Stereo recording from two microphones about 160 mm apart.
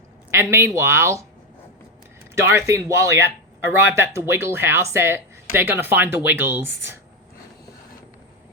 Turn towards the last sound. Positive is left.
turn(degrees=-15)  # may be behind; listen again after turning